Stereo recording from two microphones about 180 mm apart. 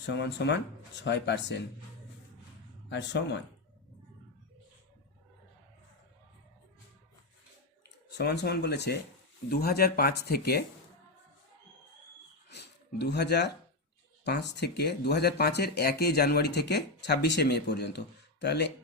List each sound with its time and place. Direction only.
0.0 s speech: 75° left (ahead or behind)
2.9 s speech: 75° left (ahead or behind)
7.9 s speech: 70° left (ahead or behind)
12.5 s speech: 70° left (ahead or behind)